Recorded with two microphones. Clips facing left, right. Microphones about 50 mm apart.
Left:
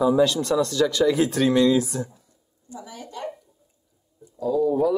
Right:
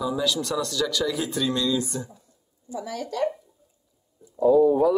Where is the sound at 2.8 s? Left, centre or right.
Right.